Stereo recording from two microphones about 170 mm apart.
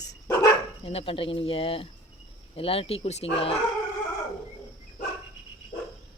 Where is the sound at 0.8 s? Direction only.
35° left (ahead or behind).